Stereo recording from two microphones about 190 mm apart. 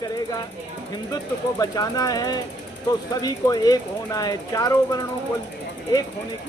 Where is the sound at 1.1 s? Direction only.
20° left (ahead or behind).